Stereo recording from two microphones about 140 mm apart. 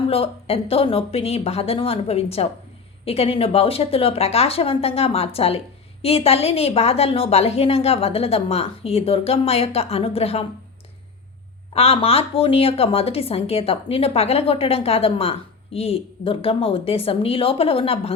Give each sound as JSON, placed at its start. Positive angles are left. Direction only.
{"t": 0.1, "sound": "speech", "side_deg": 45}
{"t": 11.7, "sound": "speech", "side_deg": 45}